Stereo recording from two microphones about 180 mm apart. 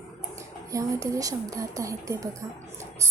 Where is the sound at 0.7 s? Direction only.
15° right (ahead or behind).